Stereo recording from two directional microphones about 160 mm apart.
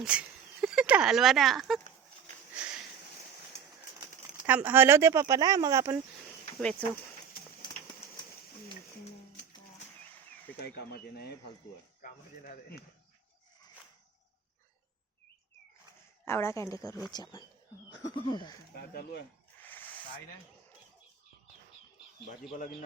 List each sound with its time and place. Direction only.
0.0 s speech: 5° right (ahead or behind)
4.4 s speech: 10° right (ahead or behind)
6.6 s speech: 5° left (ahead or behind)
10.8 s speech: 85° left
12.0 s speech: 60° left (ahead or behind)
16.2 s speech: 15° left (ahead or behind)
18.7 s speech: 80° left
19.6 s a sound: 10° left (ahead or behind)